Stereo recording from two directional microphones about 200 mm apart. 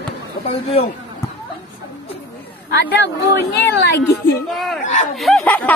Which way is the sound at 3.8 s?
55° left (ahead or behind).